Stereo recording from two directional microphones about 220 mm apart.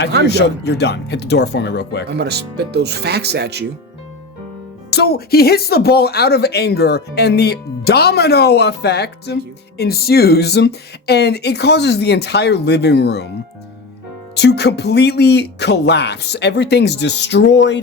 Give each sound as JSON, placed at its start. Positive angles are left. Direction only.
{"t": 0.3, "sound": "speech", "side_deg": 50}
{"t": 2.0, "sound": "speech", "side_deg": -50}
{"t": 4.9, "sound": "speech", "side_deg": 45}
{"t": 14.3, "sound": "speech", "side_deg": 50}